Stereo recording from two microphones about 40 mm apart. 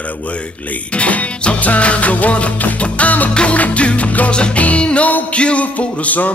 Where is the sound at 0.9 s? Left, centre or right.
Left.